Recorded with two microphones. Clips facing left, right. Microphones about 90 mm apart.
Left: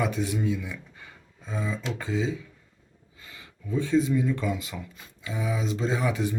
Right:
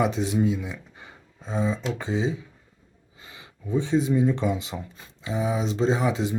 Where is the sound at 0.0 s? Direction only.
20° right (ahead or behind).